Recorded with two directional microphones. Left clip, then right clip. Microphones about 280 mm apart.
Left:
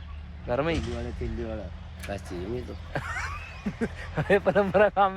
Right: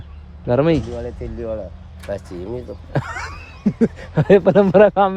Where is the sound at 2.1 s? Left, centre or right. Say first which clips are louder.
Right 8 dB; centre.